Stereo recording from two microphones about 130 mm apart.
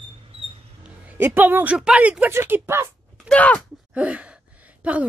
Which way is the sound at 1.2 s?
15° right (ahead or behind).